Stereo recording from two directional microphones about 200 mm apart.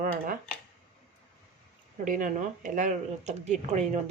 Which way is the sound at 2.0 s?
40° right (ahead or behind).